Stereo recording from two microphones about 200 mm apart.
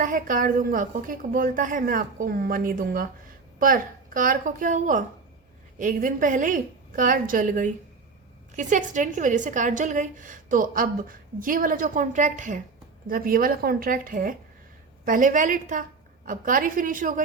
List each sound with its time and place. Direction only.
0.0 s a woman's voice: 40° right (ahead or behind)